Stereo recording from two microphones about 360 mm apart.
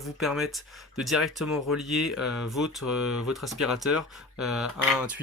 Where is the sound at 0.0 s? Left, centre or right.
Centre.